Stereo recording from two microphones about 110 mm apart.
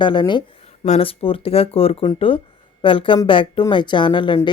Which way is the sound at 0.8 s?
60° left (ahead or behind).